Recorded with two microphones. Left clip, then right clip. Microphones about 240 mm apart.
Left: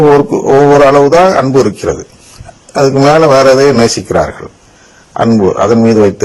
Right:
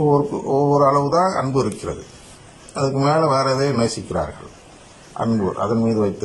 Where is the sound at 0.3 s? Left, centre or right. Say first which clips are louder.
Left 12 dB; left.